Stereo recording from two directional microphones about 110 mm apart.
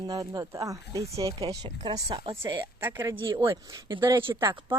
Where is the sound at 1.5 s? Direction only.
40° right (ahead or behind).